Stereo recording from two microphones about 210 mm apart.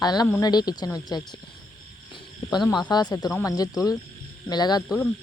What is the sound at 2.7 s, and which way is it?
Speech, 20° left (ahead or behind).